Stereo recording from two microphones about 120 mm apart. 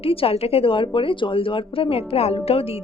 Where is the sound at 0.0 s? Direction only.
50° left (ahead or behind).